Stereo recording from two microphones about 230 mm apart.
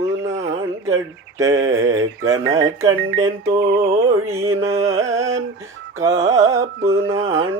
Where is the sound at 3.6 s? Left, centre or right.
Right.